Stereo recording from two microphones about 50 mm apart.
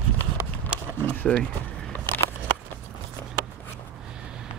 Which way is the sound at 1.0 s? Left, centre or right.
Left.